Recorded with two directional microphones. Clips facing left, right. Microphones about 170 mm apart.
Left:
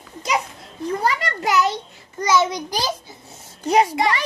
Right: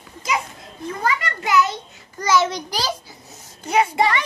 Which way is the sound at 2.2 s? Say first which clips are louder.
Even; 20° left (ahead or behind).